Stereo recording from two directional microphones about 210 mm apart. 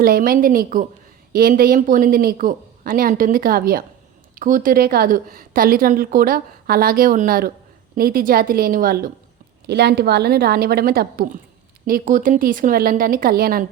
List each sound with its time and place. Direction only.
0.0 s a woman's voice: 45° right (ahead or behind)